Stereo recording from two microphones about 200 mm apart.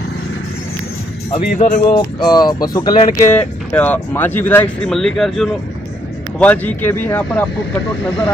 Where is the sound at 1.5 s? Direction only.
40° left (ahead or behind).